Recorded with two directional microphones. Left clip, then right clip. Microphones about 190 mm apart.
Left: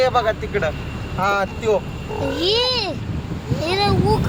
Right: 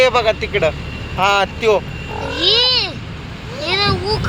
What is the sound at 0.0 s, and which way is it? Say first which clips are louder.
Speech: right 4 dB; 10° right (ahead or behind).